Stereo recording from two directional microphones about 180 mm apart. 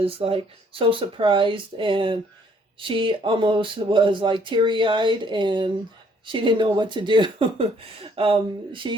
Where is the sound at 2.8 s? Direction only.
30° right (ahead or behind).